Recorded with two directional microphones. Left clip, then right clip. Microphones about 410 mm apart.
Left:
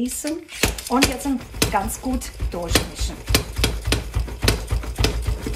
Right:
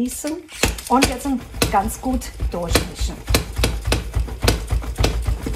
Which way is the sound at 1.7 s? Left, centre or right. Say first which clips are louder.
Right 6 dB; centre.